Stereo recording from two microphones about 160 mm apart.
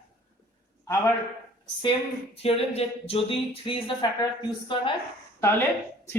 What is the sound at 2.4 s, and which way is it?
Speech, 40° left (ahead or behind).